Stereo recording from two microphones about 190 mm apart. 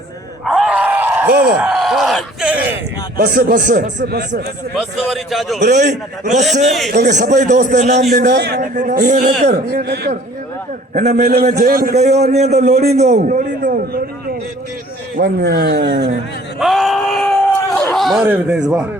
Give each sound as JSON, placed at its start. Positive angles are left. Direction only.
{"t": 0.4, "sound": "groan", "side_deg": 0}
{"t": 1.5, "sound": "a sound", "side_deg": -5}
{"t": 3.2, "sound": "a man's voice", "side_deg": -50}
{"t": 4.0, "sound": "speech", "side_deg": -55}
{"t": 4.8, "sound": "a man's voice", "side_deg": 0}
{"t": 5.5, "sound": "a man's voice", "side_deg": -40}
{"t": 8.1, "sound": "speech", "side_deg": -60}
{"t": 8.7, "sound": "a man's voice", "side_deg": -40}
{"t": 9.8, "sound": "speech", "side_deg": -60}
{"t": 11.1, "sound": "a man's voice", "side_deg": -55}
{"t": 11.9, "sound": "a man's voice", "side_deg": -35}
{"t": 16.6, "sound": "a sound", "side_deg": 0}
{"t": 18.2, "sound": "speech", "side_deg": -10}